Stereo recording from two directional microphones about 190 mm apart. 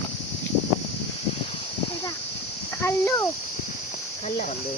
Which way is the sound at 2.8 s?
15° left (ahead or behind).